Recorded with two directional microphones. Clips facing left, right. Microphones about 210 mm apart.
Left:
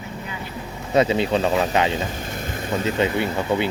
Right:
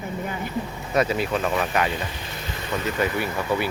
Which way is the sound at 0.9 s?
25° left (ahead or behind).